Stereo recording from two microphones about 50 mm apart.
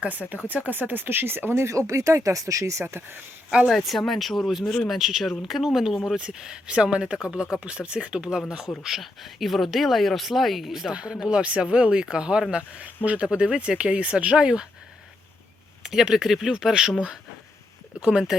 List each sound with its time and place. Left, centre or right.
0.0 s speech: right
2.8 s speech: right
3.7 s speech: centre
4.9 s speech: centre
15.8 s speech: centre
18.0 s speech: centre